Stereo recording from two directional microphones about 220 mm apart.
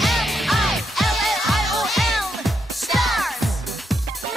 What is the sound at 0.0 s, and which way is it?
Music, centre (ahead or behind).